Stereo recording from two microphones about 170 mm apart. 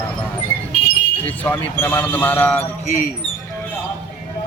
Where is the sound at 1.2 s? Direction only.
10° left (ahead or behind).